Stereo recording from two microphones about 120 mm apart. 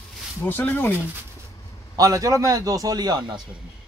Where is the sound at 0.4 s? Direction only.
15° left (ahead or behind).